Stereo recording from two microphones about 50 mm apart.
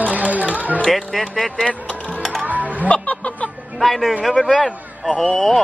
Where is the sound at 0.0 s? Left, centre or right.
Right.